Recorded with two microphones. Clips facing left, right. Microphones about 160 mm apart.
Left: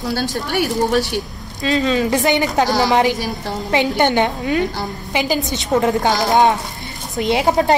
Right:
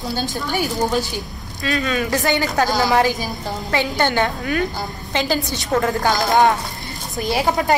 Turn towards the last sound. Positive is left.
turn(degrees=20)  # may be behind; listen again after turning